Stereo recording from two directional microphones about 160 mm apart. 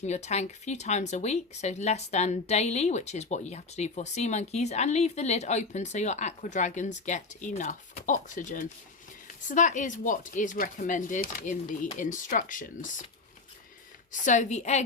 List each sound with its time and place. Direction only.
0.0 s speech: 45° left (ahead or behind)
14.1 s speech: 50° left (ahead or behind)